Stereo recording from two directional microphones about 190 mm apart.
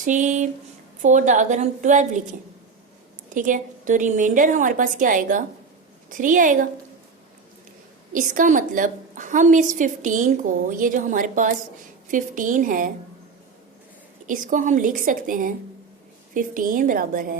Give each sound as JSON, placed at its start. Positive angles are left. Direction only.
{"t": 0.0, "sound": "a woman's voice", "side_deg": -40}
{"t": 3.3, "sound": "a woman's voice", "side_deg": -45}
{"t": 8.1, "sound": "a woman's voice", "side_deg": -40}
{"t": 14.3, "sound": "a woman's voice", "side_deg": -45}